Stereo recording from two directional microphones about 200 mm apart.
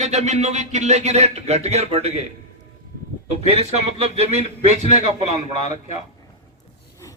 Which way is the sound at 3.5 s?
30° right (ahead or behind).